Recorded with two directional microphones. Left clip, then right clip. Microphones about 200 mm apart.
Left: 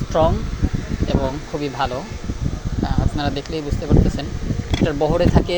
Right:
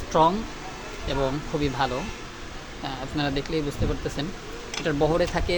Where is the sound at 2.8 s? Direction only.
5° left (ahead or behind).